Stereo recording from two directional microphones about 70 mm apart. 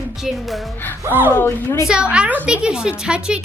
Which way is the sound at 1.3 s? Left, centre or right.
Left.